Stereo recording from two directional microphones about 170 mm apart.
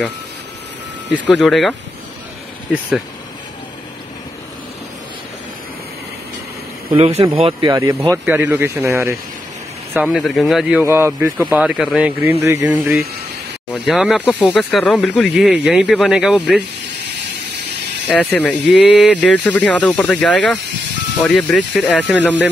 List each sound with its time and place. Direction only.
1.3 s speech: centre (ahead or behind)
6.9 s speech: 35° right (ahead or behind)
7.7 s speech: 20° right (ahead or behind)
9.9 s speech: centre (ahead or behind); by 12.7 s 15° right (ahead or behind)
13.8 s speech: centre (ahead or behind)
18.0 s speech: 10° left (ahead or behind)
18.7 s speech: 5° right (ahead or behind)
19.2 s speech: 10° left (ahead or behind)